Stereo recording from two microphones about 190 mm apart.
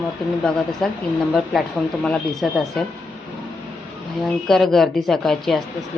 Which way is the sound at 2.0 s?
5° left (ahead or behind).